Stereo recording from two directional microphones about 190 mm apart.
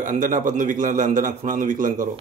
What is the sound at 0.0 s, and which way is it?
A man's voice, 45° right (ahead or behind).